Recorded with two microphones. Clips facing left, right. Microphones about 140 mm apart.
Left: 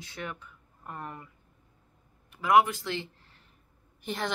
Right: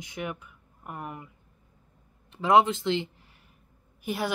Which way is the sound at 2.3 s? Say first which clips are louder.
Right 2 dB; 25° right (ahead or behind).